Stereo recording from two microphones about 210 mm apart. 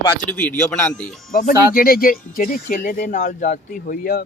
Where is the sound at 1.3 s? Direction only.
45° left (ahead or behind).